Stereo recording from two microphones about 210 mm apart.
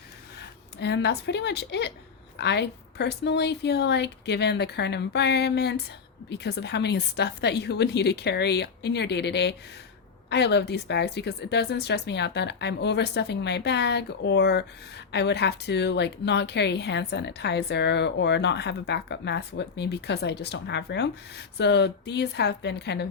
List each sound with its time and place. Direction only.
0.8 s a woman's voice: 55° left (ahead or behind)